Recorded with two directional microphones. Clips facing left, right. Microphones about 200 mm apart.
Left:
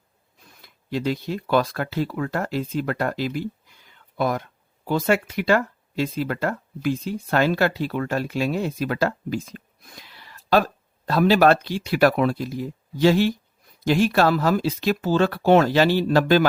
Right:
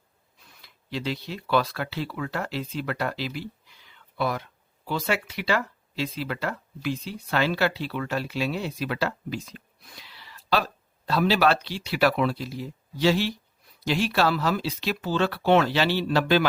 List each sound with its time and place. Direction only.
0.6 s speech: 50° left (ahead or behind)